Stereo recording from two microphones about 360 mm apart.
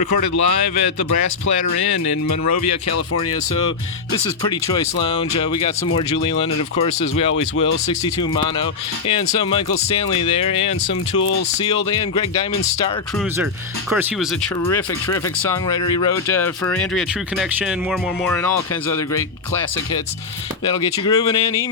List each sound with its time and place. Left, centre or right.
0.4 s speech: left
6.2 s speech: centre
14.7 s speech: centre
21.0 s speech: centre